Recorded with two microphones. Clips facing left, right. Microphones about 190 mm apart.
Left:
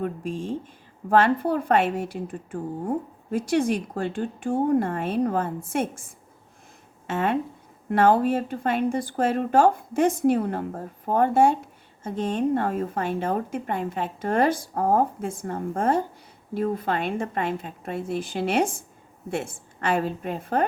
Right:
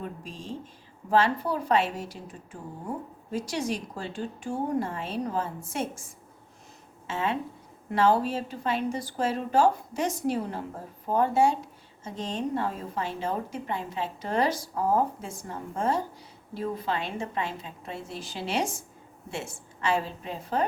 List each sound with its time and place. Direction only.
0.0 s a woman's voice: 55° left (ahead or behind)
7.1 s a woman's voice: 55° left (ahead or behind)